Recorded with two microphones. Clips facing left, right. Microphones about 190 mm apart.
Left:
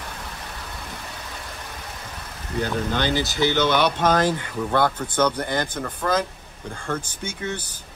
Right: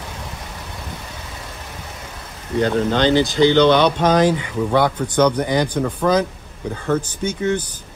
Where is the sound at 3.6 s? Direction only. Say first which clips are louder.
Right 7 dB; 20° right (ahead or behind).